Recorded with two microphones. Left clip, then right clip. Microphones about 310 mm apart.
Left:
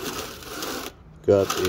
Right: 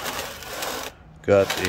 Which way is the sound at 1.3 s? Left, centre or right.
Centre.